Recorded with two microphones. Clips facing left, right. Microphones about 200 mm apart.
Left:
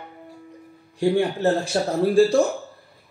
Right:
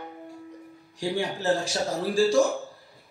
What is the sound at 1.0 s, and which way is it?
Speech, 55° left (ahead or behind).